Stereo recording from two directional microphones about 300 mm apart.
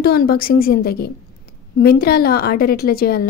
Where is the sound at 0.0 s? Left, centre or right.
Left.